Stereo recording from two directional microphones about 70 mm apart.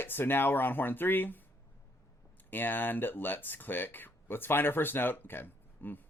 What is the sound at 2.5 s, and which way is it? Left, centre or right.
Speech, left.